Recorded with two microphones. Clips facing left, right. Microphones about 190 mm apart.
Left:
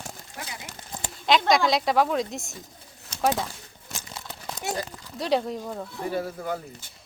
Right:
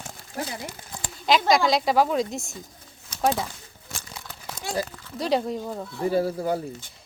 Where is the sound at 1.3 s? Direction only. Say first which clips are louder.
Right 1 dB; centre (ahead or behind).